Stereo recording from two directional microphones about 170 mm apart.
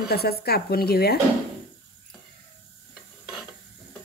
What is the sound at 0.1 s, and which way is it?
A woman's voice, 65° left (ahead or behind).